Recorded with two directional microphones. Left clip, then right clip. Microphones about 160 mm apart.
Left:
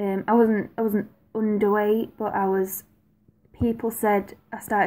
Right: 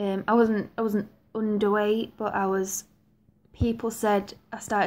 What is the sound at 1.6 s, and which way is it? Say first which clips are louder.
A woman's voice: left 2 dB; 10° left (ahead or behind).